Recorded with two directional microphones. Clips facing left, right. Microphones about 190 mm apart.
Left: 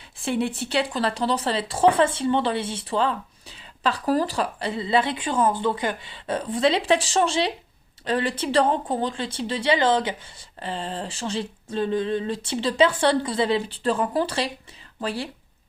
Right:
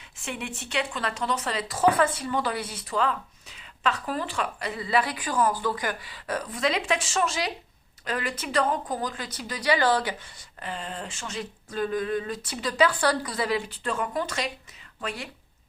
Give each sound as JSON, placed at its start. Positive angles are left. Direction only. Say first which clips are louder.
{"t": 0.2, "sound": "speech", "louder": "left 10 dB", "side_deg": 35}